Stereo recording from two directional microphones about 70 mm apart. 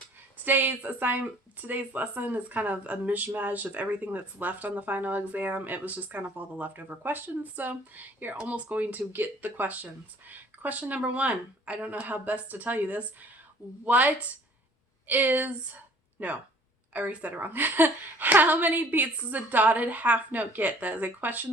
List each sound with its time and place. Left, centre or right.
0.4 s speech: right